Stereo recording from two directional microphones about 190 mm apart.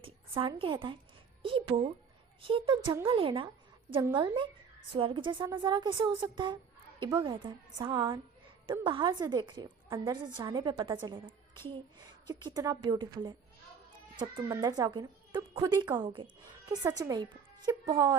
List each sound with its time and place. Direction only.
0.0 s a woman's voice: 30° right (ahead or behind)
14.4 s a woman's voice: 20° right (ahead or behind)